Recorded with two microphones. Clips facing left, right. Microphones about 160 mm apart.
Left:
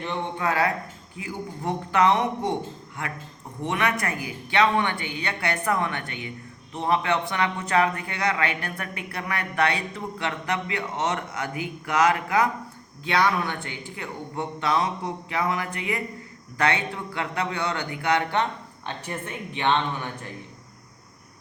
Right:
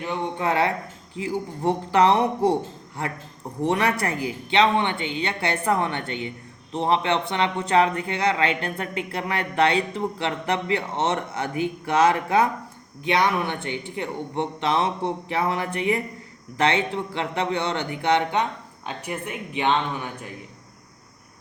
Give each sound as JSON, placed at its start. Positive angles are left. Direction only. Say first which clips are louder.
{"t": 0.3, "sound": "speech", "louder": "right 2 dB", "side_deg": -25}
{"t": 3.6, "sound": "a woman's voice", "louder": "right 4 dB", "side_deg": -35}